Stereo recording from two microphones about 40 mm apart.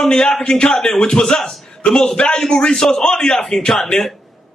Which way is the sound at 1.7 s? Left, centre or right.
Left.